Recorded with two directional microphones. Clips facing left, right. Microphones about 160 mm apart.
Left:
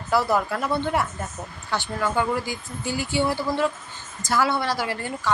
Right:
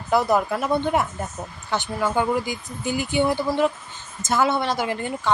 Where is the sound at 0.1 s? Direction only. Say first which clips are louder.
Right 2 dB; 20° right (ahead or behind).